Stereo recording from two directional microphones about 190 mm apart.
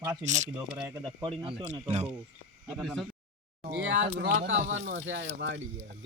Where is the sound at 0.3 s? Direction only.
40° right (ahead or behind).